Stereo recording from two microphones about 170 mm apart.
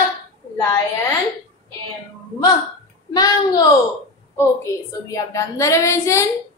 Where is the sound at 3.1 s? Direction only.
20° left (ahead or behind).